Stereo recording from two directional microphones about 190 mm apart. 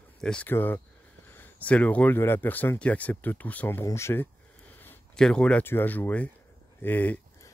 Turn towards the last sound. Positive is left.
turn(degrees=10)  # may be behind; listen again after turning